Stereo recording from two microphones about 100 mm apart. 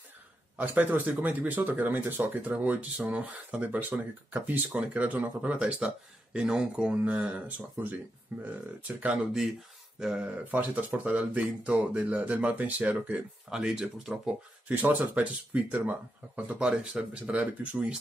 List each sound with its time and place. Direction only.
0.6 s speech: 15° right (ahead or behind)
14.7 s speech: 20° right (ahead or behind)